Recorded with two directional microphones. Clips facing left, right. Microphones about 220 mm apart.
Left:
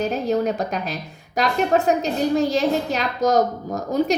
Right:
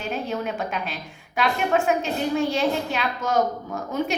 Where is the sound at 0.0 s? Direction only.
40° left (ahead or behind).